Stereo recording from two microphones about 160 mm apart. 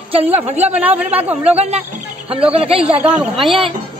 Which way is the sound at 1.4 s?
40° right (ahead or behind).